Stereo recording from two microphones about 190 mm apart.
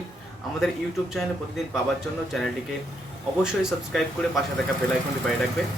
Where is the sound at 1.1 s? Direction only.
Centre (ahead or behind).